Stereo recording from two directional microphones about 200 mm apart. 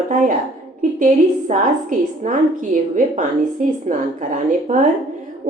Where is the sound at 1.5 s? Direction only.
40° right (ahead or behind).